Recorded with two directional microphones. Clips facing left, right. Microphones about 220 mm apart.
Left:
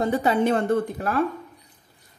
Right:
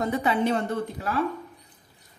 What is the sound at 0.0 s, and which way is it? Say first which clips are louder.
A woman's voice: left 3 dB; 35° left (ahead or behind).